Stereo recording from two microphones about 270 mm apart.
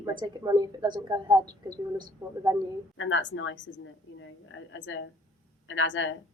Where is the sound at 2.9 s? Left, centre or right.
Left.